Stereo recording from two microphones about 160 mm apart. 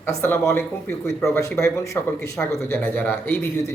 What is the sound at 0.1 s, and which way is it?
A man's voice, 15° left (ahead or behind).